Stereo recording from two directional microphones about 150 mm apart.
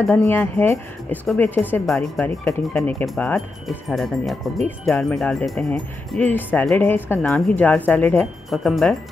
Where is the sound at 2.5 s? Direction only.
15° left (ahead or behind).